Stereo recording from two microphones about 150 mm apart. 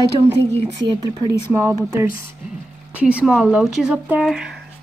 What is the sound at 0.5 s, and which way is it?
Speech, 30° right (ahead or behind).